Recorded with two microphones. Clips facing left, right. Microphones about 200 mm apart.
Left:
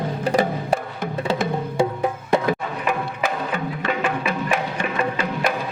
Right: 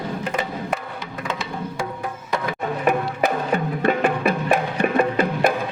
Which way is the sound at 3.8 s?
50° right (ahead or behind).